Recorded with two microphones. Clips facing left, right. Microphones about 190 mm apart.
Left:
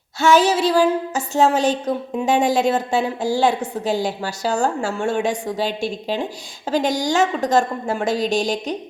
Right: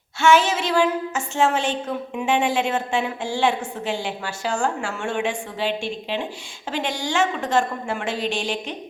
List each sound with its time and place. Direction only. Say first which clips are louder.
0.2 s a woman's voice: left 3 dB; 35° left (ahead or behind)